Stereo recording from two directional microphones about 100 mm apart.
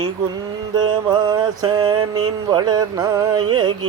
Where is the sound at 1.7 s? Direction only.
55° right (ahead or behind).